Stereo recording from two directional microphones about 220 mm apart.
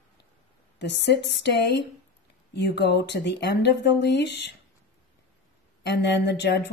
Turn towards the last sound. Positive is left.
turn(degrees=50)  # may be behind; listen again after turning